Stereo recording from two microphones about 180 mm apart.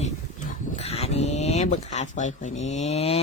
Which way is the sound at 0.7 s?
35° left (ahead or behind).